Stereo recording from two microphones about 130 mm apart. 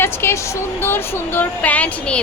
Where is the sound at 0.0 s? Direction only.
20° left (ahead or behind).